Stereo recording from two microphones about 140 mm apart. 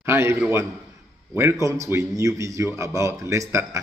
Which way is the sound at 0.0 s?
20° right (ahead or behind).